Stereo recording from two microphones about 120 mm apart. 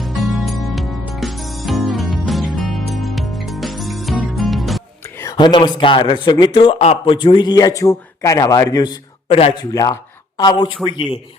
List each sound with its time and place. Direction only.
0.0 s music: centre (ahead or behind)
5.1 s a sound: 25° left (ahead or behind)
5.4 s a man's voice: 40° left (ahead or behind)
9.3 s a man's voice: 55° left (ahead or behind)
9.7 s a man's voice: 30° left (ahead or behind)